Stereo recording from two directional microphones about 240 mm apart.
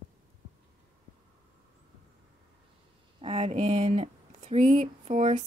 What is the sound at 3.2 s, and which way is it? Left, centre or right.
Speech, right.